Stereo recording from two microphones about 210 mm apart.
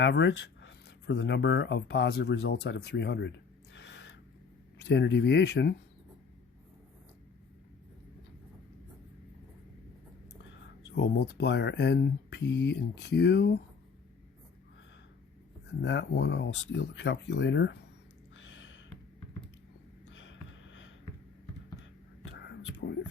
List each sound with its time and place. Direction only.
0.0 s speech: 60° left (ahead or behind)
10.8 s speech: 55° left (ahead or behind)
15.6 s speech: 55° left (ahead or behind)
18.3 s a sound: 65° left (ahead or behind)
20.1 s a sound: 60° left (ahead or behind)
22.3 s whispering: 55° left (ahead or behind)